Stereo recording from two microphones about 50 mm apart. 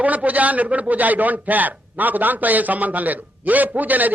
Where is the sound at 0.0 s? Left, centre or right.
Right.